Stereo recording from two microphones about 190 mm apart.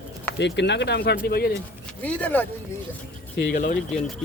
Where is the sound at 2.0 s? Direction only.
10° left (ahead or behind).